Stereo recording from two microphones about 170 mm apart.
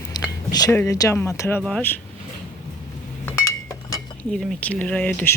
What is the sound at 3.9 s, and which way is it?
Cutlery, 5° left (ahead or behind).